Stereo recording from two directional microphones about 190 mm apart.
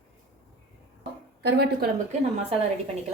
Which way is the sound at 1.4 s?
60° right (ahead or behind).